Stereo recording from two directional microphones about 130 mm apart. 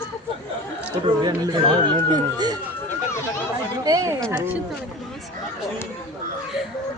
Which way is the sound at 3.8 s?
25° right (ahead or behind).